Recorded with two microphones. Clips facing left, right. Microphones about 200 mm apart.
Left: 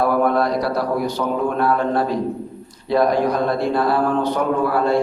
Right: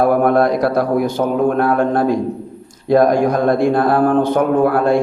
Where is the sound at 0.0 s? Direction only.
50° right (ahead or behind).